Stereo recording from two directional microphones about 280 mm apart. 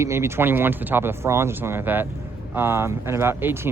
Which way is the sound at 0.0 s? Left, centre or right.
Centre.